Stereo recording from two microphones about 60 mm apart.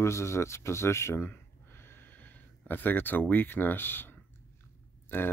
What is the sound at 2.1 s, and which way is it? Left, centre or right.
Speech, left.